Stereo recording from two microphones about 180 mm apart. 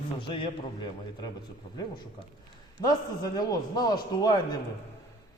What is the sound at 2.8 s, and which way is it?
A man's voice, 20° left (ahead or behind).